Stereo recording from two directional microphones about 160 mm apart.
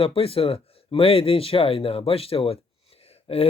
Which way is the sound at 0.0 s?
35° left (ahead or behind).